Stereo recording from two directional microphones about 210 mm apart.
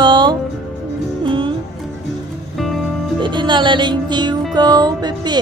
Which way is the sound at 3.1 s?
20° right (ahead or behind).